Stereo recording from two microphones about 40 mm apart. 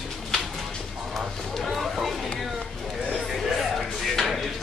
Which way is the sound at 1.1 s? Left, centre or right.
Centre.